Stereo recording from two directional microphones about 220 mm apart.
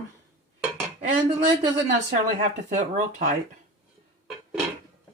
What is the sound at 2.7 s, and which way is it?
Speech, 35° right (ahead or behind).